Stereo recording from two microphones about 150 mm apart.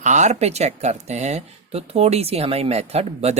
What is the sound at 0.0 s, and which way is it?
A woman's voice, 50° right (ahead or behind).